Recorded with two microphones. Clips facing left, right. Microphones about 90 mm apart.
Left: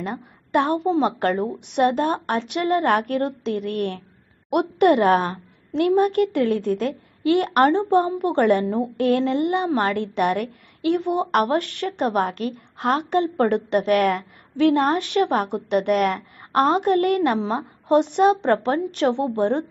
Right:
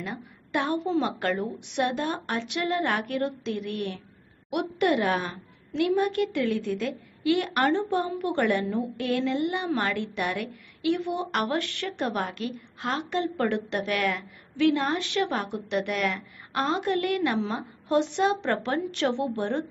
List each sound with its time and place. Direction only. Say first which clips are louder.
0.0 s a woman's voice: left 6 dB; 45° left (ahead or behind)
7.7 s a woman's voice: left 7 dB; 35° left (ahead or behind)